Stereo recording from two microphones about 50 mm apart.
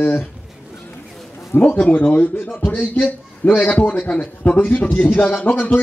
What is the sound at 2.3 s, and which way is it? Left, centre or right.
A man's voice, left.